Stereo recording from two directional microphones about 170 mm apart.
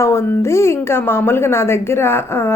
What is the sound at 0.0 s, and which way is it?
A woman's voice, 15° left (ahead or behind).